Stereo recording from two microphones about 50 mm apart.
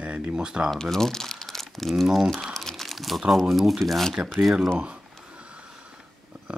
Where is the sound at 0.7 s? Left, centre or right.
Centre.